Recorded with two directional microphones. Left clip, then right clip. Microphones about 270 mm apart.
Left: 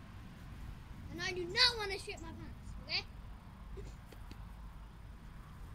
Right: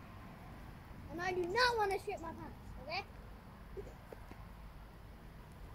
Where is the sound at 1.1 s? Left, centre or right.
Centre.